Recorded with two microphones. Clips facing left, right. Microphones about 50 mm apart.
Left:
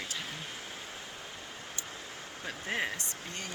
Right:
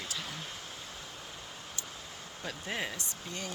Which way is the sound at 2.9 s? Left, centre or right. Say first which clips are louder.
Left 1 dB; left.